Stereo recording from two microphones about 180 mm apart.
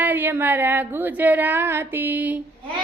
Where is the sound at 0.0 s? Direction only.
10° right (ahead or behind).